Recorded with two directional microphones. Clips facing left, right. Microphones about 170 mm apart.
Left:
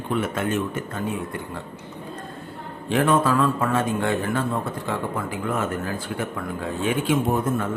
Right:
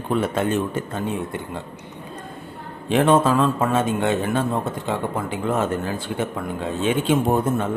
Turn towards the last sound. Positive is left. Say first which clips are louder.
# right 3 dB
turn(degrees=-25)  # may be behind; listen again after turning